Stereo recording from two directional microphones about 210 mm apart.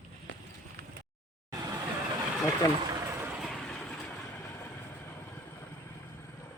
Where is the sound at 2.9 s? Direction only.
15° right (ahead or behind); by 4.2 s 5° left (ahead or behind).